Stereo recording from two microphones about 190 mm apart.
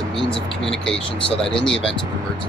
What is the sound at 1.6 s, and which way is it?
Speech, 5° left (ahead or behind).